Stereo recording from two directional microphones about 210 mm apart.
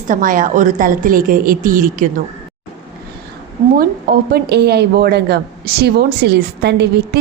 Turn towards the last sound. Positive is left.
turn(degrees=-50)  # may be behind; listen again after turning